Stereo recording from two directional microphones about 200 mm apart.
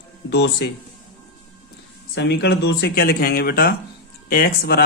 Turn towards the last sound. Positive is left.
turn(degrees=50)  # may be behind; listen again after turning